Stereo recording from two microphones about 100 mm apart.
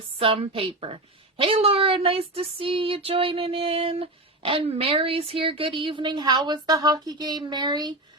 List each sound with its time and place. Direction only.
0.2 s a woman's voice: 70° right (ahead or behind); by 7.9 s 45° right (ahead or behind)